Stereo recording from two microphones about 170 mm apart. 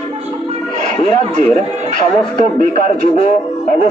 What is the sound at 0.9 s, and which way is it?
Speech, 45° right (ahead or behind).